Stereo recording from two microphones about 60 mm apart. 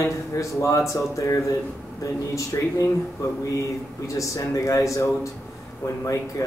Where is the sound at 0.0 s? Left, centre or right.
Left.